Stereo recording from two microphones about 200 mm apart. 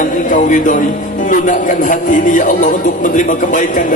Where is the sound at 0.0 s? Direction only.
40° left (ahead or behind).